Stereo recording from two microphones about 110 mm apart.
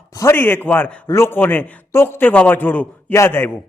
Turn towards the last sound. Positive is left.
turn(degrees=20)  # may be behind; listen again after turning